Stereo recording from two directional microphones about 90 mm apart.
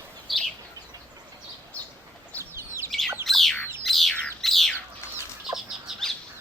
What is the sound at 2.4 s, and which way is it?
Bird, 30° right (ahead or behind).